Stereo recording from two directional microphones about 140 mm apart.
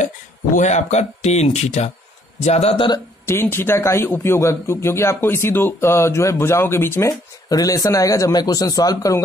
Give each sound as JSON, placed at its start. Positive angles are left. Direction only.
{"t": 0.6, "sound": "speech", "side_deg": 55}
{"t": 2.7, "sound": "speech", "side_deg": 35}
{"t": 3.3, "sound": "a man's voice", "side_deg": 15}